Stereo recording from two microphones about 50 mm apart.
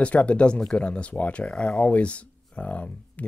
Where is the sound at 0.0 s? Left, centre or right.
Left.